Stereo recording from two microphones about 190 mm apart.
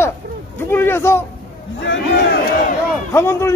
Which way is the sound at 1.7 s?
70° left (ahead or behind).